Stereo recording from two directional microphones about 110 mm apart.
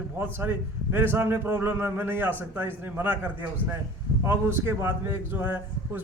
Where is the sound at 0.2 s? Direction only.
20° right (ahead or behind).